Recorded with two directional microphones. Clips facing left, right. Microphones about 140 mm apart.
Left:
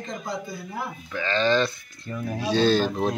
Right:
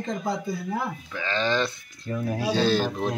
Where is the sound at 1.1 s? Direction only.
15° right (ahead or behind).